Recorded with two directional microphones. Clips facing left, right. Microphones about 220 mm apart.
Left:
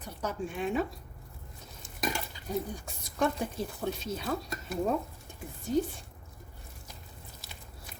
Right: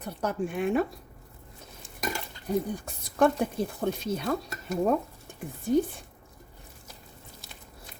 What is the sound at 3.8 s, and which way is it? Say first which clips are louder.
Stir: right 4 dB; 55° right (ahead or behind).